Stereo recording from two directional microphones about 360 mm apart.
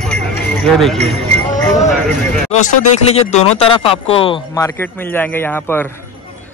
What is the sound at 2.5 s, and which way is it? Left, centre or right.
Speech, centre.